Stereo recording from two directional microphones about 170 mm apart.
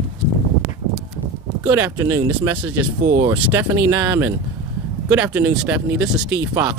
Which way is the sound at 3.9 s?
10° right (ahead or behind).